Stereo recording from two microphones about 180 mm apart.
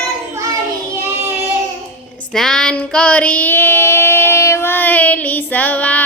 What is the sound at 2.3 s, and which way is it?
Child singing, 5° left (ahead or behind).